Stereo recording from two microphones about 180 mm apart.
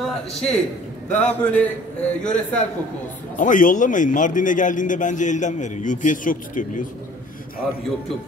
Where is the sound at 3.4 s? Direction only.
45° left (ahead or behind).